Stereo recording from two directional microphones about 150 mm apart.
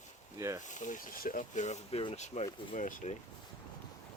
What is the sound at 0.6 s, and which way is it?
Speech, 55° left (ahead or behind).